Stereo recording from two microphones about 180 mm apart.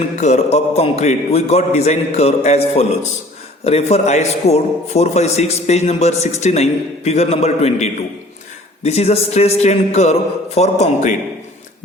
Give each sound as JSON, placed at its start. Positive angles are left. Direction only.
{"t": 0.2, "sound": "a man's voice", "side_deg": 40}